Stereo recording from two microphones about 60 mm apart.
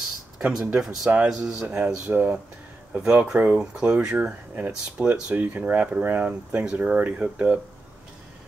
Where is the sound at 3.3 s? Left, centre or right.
Right.